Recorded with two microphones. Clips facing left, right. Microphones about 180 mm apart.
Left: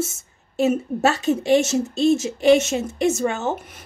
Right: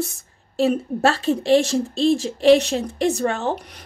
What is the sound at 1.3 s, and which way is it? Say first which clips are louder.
Speech: right 1 dB; 5° left (ahead or behind).